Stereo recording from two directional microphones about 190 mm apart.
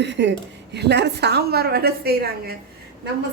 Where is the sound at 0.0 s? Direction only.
70° right (ahead or behind).